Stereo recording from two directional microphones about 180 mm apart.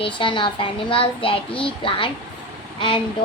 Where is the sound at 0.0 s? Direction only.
30° left (ahead or behind).